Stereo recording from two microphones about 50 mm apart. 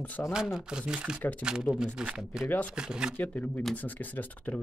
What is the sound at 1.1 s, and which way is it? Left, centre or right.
Speech, left.